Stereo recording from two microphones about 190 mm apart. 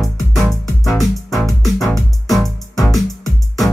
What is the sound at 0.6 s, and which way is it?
Music, 15° left (ahead or behind).